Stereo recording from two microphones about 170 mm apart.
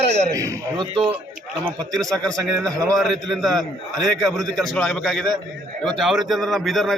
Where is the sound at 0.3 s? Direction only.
20° right (ahead or behind).